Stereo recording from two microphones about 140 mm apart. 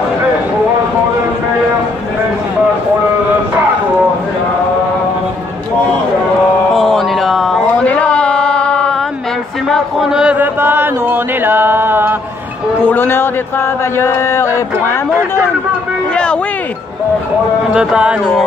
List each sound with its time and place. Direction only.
6.7 s a sound: centre (ahead or behind)
9.7 s chant: centre (ahead or behind)
12.8 s speech: 15° left (ahead or behind)
17.7 s music: 5° right (ahead or behind)